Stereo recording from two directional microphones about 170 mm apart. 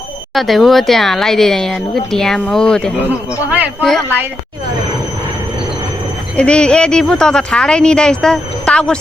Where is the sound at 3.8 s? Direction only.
5° left (ahead or behind).